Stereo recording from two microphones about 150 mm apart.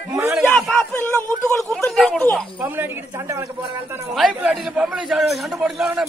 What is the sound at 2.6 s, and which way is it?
Speech, 15° right (ahead or behind).